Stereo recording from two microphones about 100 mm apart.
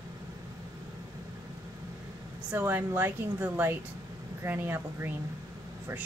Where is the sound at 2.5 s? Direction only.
20° right (ahead or behind).